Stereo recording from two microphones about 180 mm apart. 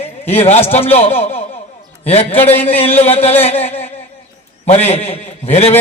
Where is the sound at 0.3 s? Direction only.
35° left (ahead or behind).